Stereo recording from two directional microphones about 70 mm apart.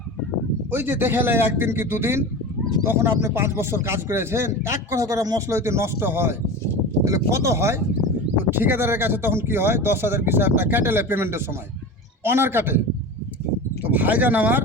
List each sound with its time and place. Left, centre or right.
0.7 s speech: right
5.0 s speech: right
5.5 s speech: right
7.0 s speech: right
8.4 s speech: right
13.8 s speech: right